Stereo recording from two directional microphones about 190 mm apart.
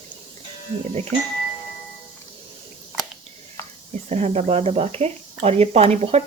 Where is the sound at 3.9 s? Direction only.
35° right (ahead or behind).